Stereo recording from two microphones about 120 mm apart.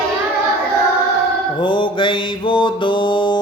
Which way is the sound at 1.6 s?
45° left (ahead or behind).